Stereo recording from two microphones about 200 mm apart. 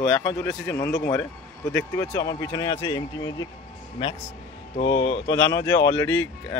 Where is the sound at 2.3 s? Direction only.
20° left (ahead or behind).